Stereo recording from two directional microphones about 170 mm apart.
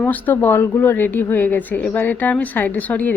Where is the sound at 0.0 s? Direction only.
10° left (ahead or behind).